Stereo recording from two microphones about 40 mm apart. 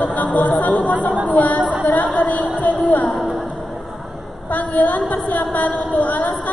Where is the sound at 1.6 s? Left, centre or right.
Right.